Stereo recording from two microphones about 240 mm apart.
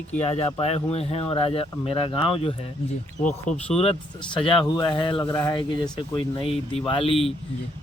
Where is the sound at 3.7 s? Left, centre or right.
Left.